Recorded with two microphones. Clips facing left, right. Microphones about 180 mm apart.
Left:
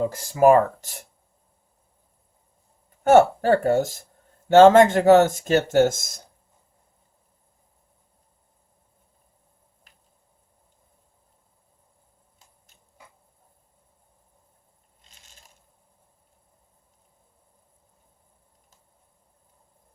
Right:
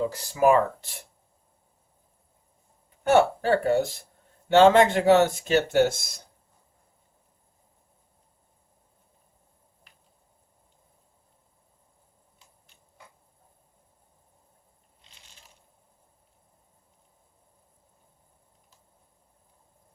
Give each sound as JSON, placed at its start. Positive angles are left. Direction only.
{"t": 0.0, "sound": "speech", "side_deg": 45}
{"t": 3.0, "sound": "speech", "side_deg": 45}
{"t": 15.0, "sound": "a sound", "side_deg": 45}